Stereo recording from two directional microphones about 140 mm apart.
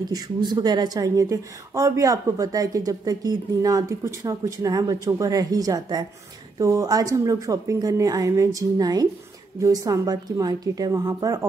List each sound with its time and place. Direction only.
0.1 s a woman's voice: 30° right (ahead or behind)